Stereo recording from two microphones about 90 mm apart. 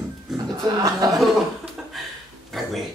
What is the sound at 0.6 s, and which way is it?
Speech, 45° right (ahead or behind).